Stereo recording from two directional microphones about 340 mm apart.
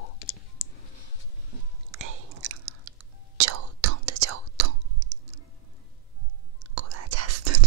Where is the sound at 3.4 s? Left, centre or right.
Right.